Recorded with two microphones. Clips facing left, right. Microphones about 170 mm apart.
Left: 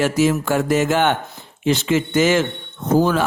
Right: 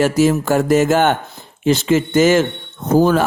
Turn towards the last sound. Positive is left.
turn(degrees=-45)  # may be behind; listen again after turning